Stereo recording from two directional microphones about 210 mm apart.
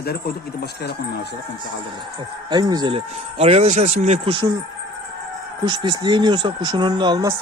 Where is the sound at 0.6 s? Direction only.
50° left (ahead or behind).